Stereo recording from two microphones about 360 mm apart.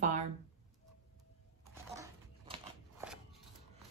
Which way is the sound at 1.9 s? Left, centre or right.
Centre.